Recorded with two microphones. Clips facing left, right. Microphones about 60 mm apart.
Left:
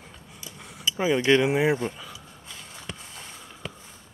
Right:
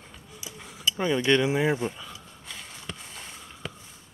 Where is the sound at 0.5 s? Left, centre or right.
Centre.